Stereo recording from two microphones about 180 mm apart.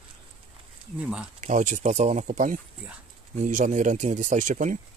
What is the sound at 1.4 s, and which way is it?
Speech, 40° right (ahead or behind).